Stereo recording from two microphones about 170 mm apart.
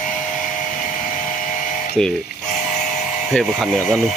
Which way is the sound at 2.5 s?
45° left (ahead or behind).